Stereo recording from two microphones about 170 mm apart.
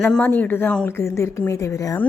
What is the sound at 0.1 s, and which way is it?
A woman's voice, 10° left (ahead or behind).